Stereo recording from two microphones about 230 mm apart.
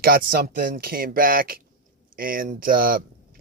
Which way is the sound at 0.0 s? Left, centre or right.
Right.